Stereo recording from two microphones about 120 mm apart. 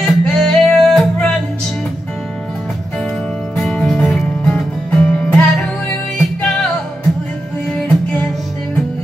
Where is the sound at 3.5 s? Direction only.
5° left (ahead or behind).